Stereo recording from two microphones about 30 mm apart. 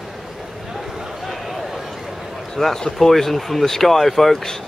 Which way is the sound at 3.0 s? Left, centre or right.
Centre.